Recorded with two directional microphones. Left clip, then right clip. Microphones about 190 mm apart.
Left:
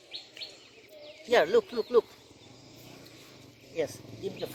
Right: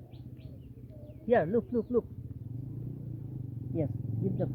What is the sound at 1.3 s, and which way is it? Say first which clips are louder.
Speech: left 3 dB; 35° left (ahead or behind).